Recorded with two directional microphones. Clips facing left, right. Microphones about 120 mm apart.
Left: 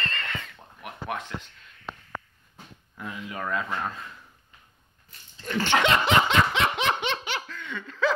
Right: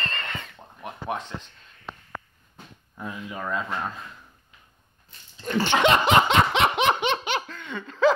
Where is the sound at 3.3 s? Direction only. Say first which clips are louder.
Even; 15° right (ahead or behind).